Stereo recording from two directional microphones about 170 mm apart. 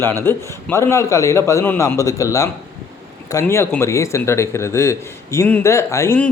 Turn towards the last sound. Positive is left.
turn(degrees=15)  # may be behind; listen again after turning